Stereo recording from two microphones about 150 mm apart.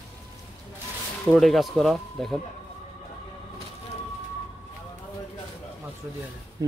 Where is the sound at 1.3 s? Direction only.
Centre (ahead or behind).